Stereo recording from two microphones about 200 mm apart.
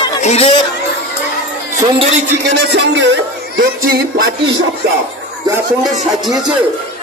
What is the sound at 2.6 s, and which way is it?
Speech, 60° right (ahead or behind).